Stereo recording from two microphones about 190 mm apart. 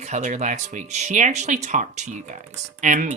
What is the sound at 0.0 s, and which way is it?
Speech, 40° right (ahead or behind).